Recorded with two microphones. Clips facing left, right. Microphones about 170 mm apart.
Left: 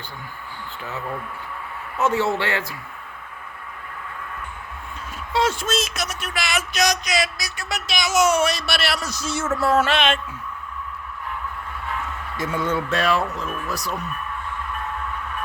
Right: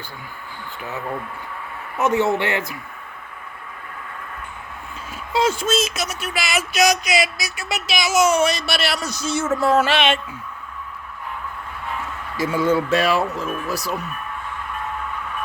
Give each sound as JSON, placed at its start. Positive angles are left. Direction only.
{"t": 2.0, "sound": "speech", "side_deg": -20}
{"t": 5.3, "sound": "speech", "side_deg": 0}
{"t": 12.4, "sound": "speech", "side_deg": -5}